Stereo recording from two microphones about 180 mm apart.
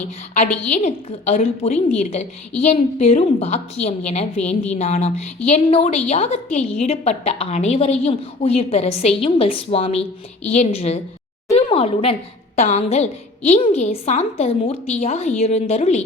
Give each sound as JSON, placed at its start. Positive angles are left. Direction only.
{"t": 0.3, "sound": "a woman's voice", "side_deg": 40}